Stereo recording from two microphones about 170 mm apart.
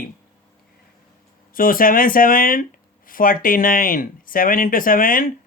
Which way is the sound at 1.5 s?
55° left (ahead or behind).